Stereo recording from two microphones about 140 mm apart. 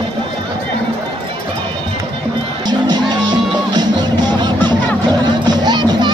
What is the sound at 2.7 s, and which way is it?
Music, 30° right (ahead or behind).